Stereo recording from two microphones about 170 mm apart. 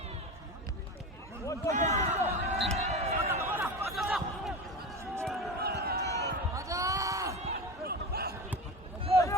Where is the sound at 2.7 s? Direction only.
40° right (ahead or behind).